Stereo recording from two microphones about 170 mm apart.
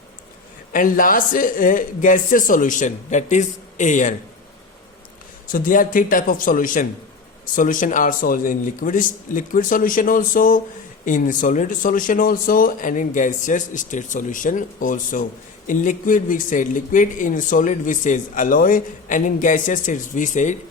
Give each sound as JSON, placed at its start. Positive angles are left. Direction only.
{"t": 0.7, "sound": "speech", "side_deg": 55}
{"t": 5.5, "sound": "speech", "side_deg": 55}